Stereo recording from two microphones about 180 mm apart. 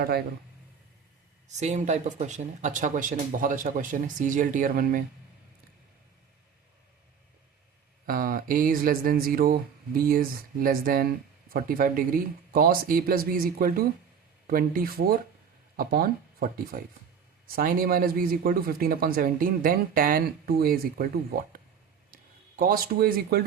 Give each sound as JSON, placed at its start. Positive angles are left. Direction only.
{"t": 0.0, "sound": "speech", "side_deg": -55}
{"t": 1.5, "sound": "speech", "side_deg": -40}
{"t": 8.0, "sound": "speech", "side_deg": -55}
{"t": 22.1, "sound": "speech", "side_deg": -55}